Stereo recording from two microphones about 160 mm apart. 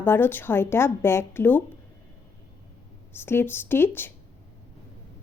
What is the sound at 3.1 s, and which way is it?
Speech, 15° left (ahead or behind).